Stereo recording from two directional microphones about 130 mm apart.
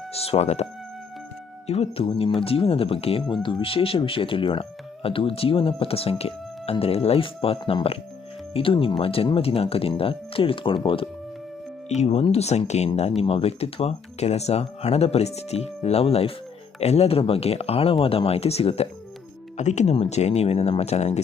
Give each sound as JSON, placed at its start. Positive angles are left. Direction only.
{"t": 0.1, "sound": "speech", "side_deg": 50}
{"t": 11.9, "sound": "speech", "side_deg": 55}
{"t": 19.5, "sound": "speech", "side_deg": 65}